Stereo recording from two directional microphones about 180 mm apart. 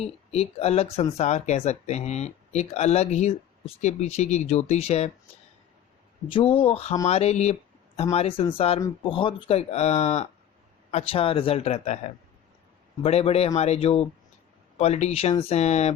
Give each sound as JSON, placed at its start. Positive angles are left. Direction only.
{"t": 0.0, "sound": "speech", "side_deg": 35}
{"t": 6.2, "sound": "speech", "side_deg": 30}